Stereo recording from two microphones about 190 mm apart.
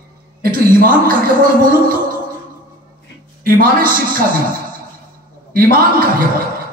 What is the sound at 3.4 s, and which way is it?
Speech, 50° right (ahead or behind).